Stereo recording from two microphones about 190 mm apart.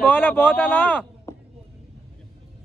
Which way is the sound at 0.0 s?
10° left (ahead or behind).